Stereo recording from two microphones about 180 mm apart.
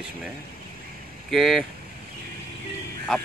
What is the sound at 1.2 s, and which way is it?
Speech, centre (ahead or behind).